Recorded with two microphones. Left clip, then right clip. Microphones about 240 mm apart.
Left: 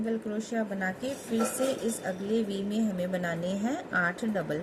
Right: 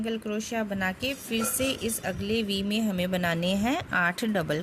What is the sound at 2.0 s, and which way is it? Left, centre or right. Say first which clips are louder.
Speech: right 3 dB; right.